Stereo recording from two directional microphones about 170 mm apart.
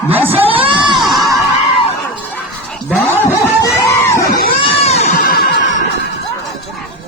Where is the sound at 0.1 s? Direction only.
10° right (ahead or behind).